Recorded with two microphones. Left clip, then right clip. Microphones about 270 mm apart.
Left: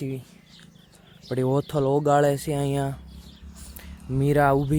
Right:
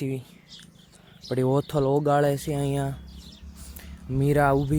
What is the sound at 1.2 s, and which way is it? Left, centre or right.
Speech, centre.